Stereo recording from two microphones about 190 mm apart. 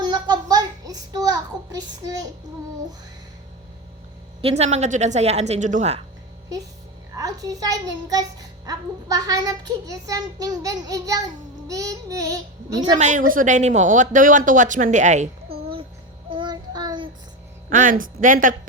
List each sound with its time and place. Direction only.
0.0 s a sound: 20° right (ahead or behind)
4.4 s a woman's voice: 35° right (ahead or behind)
7.2 s a child's voice: 20° right (ahead or behind)
12.8 s a woman's voice: 35° right (ahead or behind)
16.3 s child singing: 25° right (ahead or behind)
17.7 s speech: 45° right (ahead or behind)